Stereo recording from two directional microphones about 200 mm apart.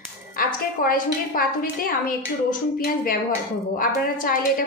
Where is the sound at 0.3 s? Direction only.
45° left (ahead or behind).